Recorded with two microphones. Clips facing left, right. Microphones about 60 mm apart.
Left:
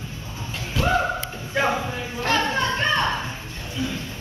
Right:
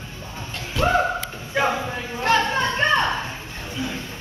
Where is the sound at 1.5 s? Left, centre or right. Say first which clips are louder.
Right 1 dB; centre.